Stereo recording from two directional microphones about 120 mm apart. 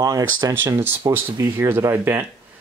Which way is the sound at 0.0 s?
30° right (ahead or behind).